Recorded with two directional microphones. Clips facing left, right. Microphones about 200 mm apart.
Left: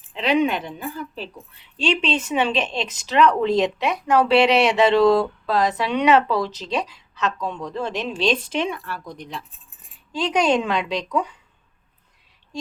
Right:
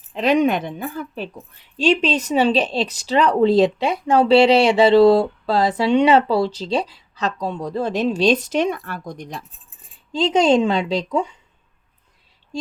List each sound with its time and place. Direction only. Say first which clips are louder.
0.1 s a woman's voice: right 3 dB; 45° right (ahead or behind)
10.1 s a woman's voice: right 4 dB; 25° right (ahead or behind)